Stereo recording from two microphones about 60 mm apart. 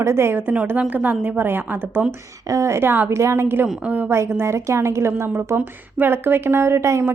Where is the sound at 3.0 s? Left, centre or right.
Right.